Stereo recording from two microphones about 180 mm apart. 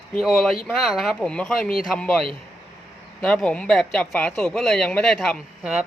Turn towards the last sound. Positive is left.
turn(degrees=-5)  # may be behind; listen again after turning